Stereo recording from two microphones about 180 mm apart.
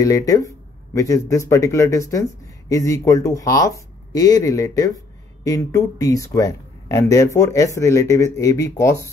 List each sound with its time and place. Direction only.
0.0 s speech: 20° left (ahead or behind)